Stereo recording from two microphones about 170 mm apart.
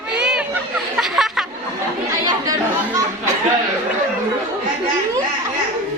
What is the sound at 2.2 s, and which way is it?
Chatter, 20° right (ahead or behind).